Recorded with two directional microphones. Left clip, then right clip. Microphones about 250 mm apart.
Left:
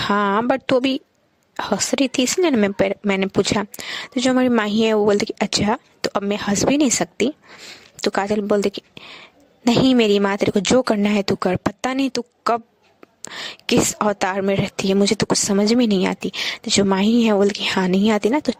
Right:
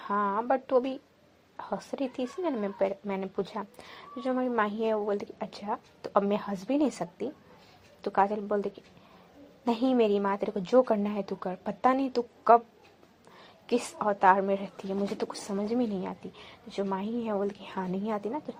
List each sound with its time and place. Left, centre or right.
0.0 s speech: left